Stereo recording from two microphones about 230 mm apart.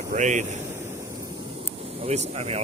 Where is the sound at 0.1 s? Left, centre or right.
Right.